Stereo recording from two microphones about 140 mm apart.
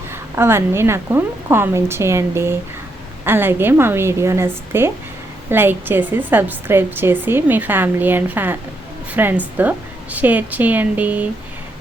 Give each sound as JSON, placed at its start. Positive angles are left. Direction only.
{"t": 0.1, "sound": "a woman's voice", "side_deg": -15}